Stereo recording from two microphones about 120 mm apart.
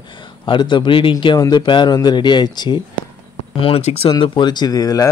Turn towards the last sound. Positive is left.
turn(degrees=30)  # may be behind; listen again after turning